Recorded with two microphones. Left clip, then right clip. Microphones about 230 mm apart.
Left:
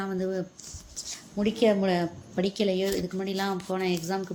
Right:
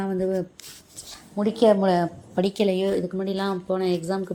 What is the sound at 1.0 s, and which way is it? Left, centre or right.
Writing, centre.